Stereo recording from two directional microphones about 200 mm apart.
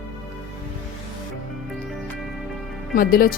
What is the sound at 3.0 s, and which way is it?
Speech, 45° left (ahead or behind).